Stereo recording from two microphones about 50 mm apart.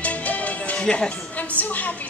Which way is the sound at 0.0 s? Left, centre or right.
Left.